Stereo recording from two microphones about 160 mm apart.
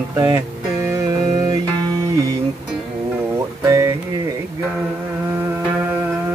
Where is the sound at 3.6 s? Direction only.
20° right (ahead or behind).